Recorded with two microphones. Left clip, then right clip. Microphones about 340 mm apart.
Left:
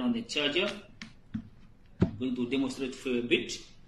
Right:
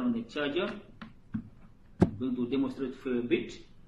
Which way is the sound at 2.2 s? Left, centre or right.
Centre.